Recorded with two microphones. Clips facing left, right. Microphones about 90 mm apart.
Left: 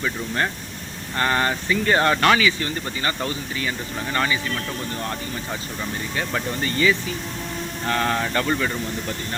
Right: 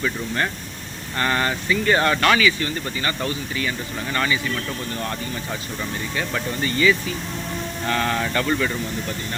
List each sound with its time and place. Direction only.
1.2 s speech: 30° left (ahead or behind)
6.6 s speech: 35° left (ahead or behind); by 8.7 s 15° left (ahead or behind)